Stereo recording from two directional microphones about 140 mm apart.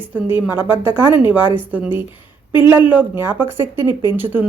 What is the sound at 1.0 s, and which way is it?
Speech, 35° left (ahead or behind).